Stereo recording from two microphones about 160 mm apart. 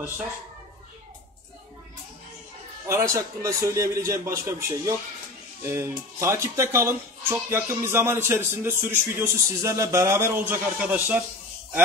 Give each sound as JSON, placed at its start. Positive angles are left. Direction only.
{"t": 2.9, "sound": "a man's voice", "side_deg": -20}